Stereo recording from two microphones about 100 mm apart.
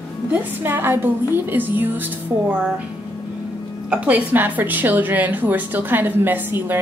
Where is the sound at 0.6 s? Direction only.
20° right (ahead or behind).